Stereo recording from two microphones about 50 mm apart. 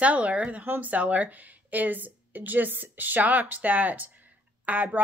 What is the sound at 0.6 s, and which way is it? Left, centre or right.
Speech, right.